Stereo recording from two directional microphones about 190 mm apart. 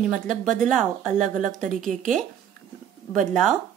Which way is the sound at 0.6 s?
5° left (ahead or behind).